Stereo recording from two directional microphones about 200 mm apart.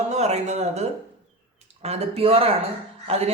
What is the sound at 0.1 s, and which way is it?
Speech, 35° right (ahead or behind).